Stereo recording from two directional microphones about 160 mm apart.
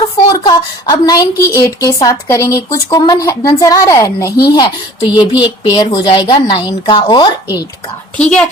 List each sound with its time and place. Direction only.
0.3 s a woman's voice: 25° left (ahead or behind)